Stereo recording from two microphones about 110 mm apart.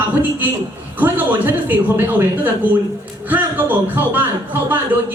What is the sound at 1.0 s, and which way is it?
A man's voice, 15° right (ahead or behind).